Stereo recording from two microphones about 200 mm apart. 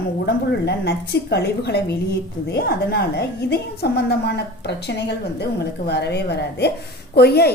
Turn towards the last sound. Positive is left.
turn(degrees=55)  # may be behind; listen again after turning